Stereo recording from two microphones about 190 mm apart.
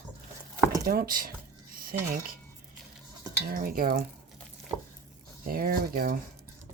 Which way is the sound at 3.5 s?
50° right (ahead or behind).